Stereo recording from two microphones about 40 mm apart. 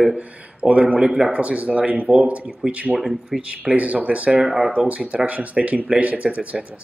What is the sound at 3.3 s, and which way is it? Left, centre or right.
Speech, right.